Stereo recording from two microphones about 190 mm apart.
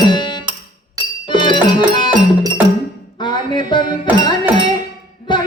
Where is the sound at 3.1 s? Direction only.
25° left (ahead or behind).